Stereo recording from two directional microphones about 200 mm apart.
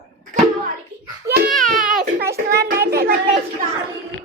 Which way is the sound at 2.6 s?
50° right (ahead or behind).